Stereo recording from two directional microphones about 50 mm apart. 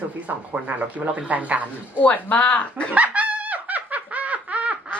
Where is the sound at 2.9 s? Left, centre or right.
Right.